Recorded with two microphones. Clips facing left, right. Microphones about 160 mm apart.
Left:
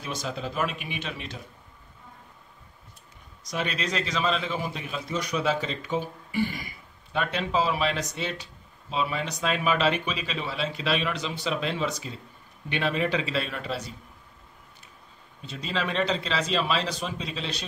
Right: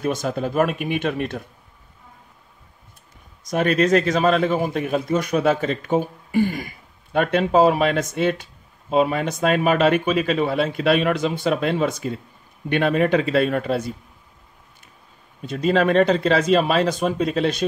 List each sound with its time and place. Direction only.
0.0 s a man's voice: 50° right (ahead or behind)
3.4 s a man's voice: 50° right (ahead or behind)
15.4 s a man's voice: 50° right (ahead or behind)